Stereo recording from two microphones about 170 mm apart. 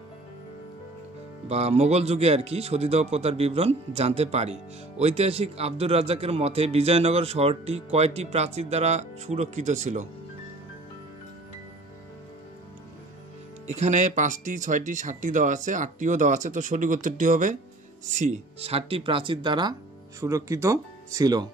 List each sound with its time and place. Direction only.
1.5 s a man's voice: 40° right (ahead or behind)
13.7 s a man's voice: 40° right (ahead or behind); by 21.5 s 20° right (ahead or behind)